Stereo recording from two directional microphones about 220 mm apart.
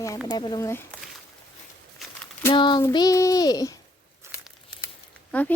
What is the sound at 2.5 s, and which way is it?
Child singing, 20° left (ahead or behind).